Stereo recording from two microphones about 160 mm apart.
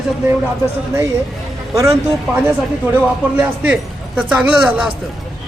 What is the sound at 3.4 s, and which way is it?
A man's voice, 10° right (ahead or behind).